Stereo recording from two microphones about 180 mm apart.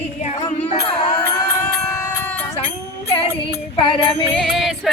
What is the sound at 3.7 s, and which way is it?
Music, 30° left (ahead or behind).